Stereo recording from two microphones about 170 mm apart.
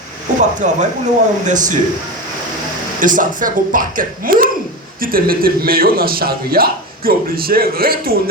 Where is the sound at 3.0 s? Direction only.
50° right (ahead or behind).